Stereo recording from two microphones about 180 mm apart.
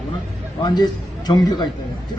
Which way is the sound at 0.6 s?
25° left (ahead or behind).